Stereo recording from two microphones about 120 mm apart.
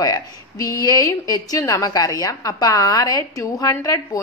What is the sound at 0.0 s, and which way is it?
A woman's voice, 30° left (ahead or behind).